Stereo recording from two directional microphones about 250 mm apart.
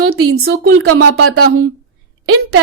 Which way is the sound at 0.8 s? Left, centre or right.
Right.